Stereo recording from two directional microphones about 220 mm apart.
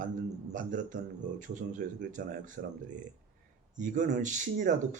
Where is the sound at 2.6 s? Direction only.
45° right (ahead or behind).